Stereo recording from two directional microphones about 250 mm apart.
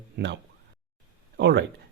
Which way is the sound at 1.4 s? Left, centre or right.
Right.